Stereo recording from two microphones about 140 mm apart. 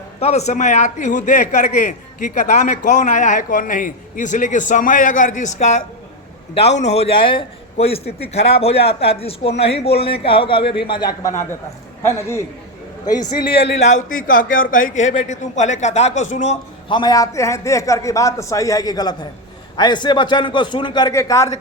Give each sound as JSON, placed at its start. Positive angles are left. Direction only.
{"t": 0.2, "sound": "a man's voice", "side_deg": 50}
{"t": 12.0, "sound": "a man's voice", "side_deg": 20}
{"t": 13.5, "sound": "a man's voice", "side_deg": 45}
{"t": 16.9, "sound": "a man's voice", "side_deg": 30}
{"t": 21.1, "sound": "a man's voice", "side_deg": 20}